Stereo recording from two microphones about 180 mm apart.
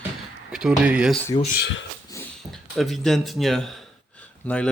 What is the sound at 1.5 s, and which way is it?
Speech, 70° left (ahead or behind).